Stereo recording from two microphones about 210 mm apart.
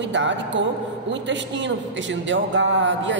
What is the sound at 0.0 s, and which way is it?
A man's voice, 60° right (ahead or behind).